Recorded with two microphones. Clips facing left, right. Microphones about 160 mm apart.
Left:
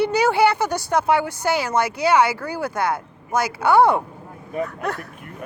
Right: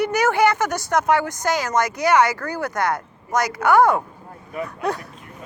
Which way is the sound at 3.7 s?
30° left (ahead or behind).